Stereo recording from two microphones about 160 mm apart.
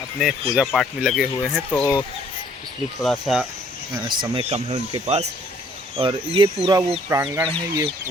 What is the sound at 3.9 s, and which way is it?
Speech, 30° right (ahead or behind).